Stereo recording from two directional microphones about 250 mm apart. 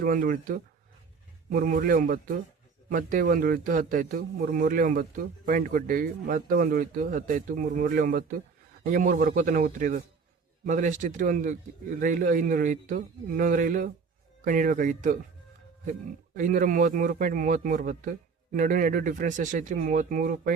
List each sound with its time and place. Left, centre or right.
0.0 s speech: right